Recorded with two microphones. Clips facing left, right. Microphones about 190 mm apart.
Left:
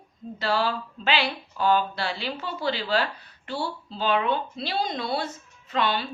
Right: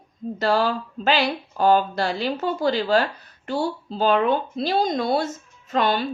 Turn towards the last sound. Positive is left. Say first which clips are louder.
# right 4 dB
turn(degrees=-45)  # may be behind; listen again after turning